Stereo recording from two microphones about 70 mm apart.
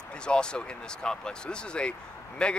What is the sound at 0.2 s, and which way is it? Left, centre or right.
Speech, centre.